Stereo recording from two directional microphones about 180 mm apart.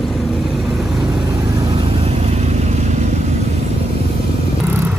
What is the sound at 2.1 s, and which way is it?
Vehicle, 35° right (ahead or behind).